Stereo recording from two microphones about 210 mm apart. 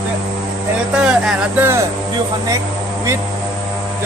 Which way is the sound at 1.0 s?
5° right (ahead or behind).